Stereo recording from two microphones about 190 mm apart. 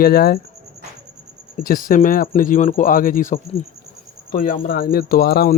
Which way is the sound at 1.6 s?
45° left (ahead or behind).